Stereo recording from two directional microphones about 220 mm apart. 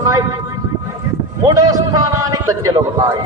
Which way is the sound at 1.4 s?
15° right (ahead or behind).